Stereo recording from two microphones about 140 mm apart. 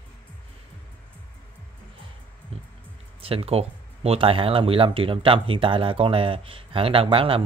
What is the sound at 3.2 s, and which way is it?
Speech, 40° right (ahead or behind).